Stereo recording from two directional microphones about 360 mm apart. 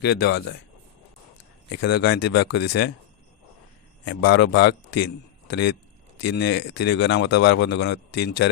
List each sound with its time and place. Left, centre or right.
0.0 s speech: left
1.7 s speech: left
4.0 s a man's voice: left